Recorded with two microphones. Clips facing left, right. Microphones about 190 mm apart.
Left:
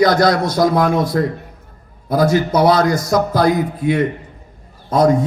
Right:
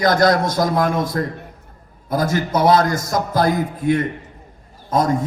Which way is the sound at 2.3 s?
45° right (ahead or behind).